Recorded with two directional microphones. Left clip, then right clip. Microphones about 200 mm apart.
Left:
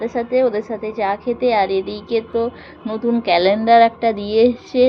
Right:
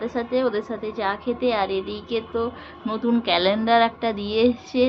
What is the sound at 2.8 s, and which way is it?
A woman's voice, 5° left (ahead or behind).